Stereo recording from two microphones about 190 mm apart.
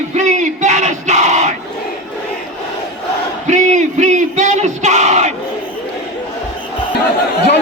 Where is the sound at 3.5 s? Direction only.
40° right (ahead or behind).